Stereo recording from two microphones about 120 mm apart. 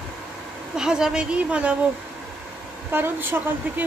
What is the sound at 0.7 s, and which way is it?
Speech, 5° right (ahead or behind).